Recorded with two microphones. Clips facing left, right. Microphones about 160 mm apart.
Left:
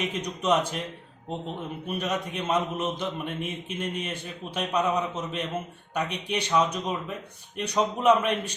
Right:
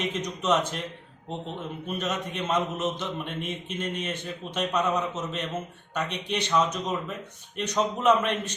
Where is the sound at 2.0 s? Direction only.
10° left (ahead or behind).